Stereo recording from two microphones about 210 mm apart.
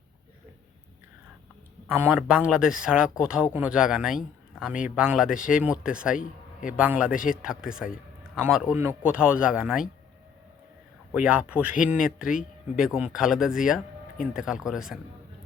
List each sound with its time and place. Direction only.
1.9 s speech: 10° right (ahead or behind)
6.1 s a man's voice: 40° left (ahead or behind)
6.7 s speech: 5° right (ahead or behind)
11.3 s speech: 5° right (ahead or behind)